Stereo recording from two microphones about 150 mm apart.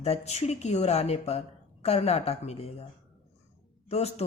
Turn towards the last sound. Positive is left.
turn(degrees=45)  # may be behind; listen again after turning